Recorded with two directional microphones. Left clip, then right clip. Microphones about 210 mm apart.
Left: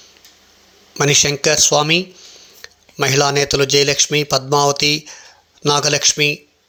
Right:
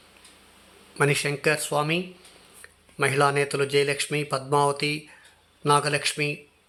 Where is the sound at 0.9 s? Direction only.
25° left (ahead or behind).